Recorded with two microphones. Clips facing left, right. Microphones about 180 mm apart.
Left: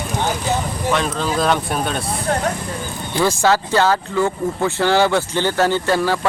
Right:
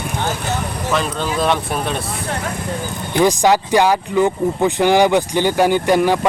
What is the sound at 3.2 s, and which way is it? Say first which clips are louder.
Speech: right 3 dB; 15° right (ahead or behind).